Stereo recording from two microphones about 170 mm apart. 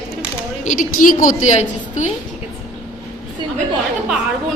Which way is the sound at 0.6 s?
50° left (ahead or behind).